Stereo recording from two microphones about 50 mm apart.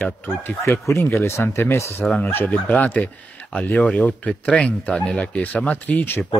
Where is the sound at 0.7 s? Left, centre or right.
Left.